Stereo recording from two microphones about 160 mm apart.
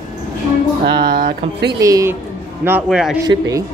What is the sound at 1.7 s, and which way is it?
Speech, 20° right (ahead or behind).